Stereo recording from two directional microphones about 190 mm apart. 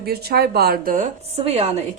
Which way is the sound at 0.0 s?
55° right (ahead or behind).